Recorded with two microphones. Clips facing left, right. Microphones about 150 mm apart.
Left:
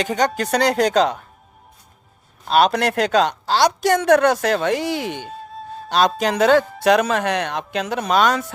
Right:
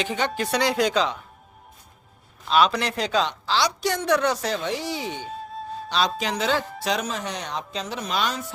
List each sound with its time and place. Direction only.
0.0 s speech: 45° left (ahead or behind)
2.4 s a woman's voice: 45° left (ahead or behind)
5.2 s music: centre (ahead or behind)
5.9 s a woman's voice: 50° left (ahead or behind)